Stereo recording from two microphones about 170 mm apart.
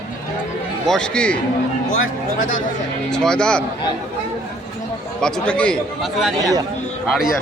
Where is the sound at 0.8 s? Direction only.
5° left (ahead or behind).